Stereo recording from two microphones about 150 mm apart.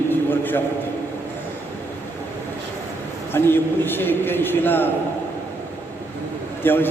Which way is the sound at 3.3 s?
15° left (ahead or behind).